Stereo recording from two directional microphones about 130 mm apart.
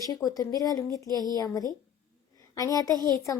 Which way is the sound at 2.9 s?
30° right (ahead or behind).